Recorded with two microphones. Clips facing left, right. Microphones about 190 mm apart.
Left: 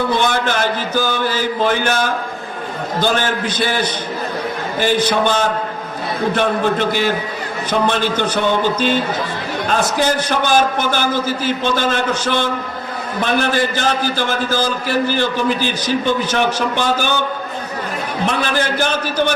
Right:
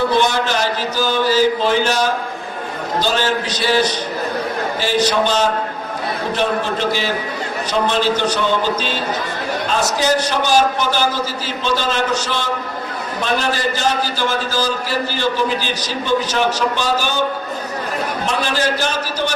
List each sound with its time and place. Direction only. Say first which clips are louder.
0.2 s a man's voice: even; 55° left (ahead or behind)
18.3 s a man's voice: left 1 dB; 55° left (ahead or behind)